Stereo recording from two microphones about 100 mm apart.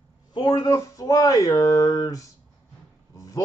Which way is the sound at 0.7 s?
35° left (ahead or behind).